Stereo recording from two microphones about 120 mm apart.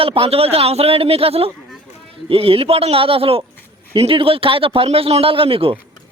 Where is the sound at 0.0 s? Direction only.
50° right (ahead or behind).